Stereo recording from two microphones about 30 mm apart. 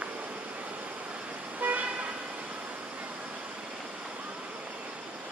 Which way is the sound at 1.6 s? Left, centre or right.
Right.